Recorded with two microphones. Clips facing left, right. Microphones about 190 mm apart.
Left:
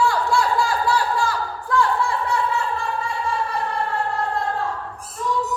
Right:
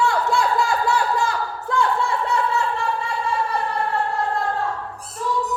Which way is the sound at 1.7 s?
25° right (ahead or behind).